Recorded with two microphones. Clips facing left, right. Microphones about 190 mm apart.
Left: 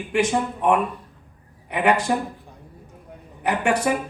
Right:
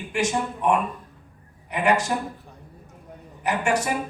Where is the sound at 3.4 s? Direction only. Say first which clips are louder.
Left 2 dB; 55° left (ahead or behind).